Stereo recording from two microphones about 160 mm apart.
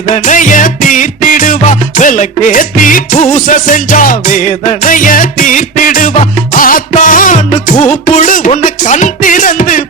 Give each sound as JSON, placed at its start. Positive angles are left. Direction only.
{"t": 0.1, "sound": "music", "side_deg": 50}